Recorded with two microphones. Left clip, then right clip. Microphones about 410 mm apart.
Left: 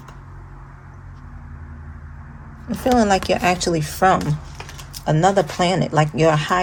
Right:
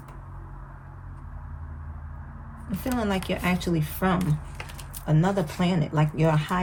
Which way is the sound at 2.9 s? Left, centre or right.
Centre.